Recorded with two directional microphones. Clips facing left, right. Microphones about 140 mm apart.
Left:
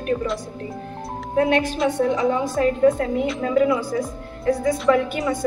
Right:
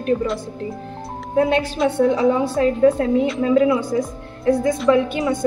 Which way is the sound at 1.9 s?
30° right (ahead or behind).